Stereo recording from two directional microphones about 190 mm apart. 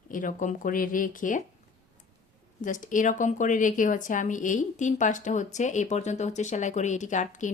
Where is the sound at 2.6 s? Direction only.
45° left (ahead or behind).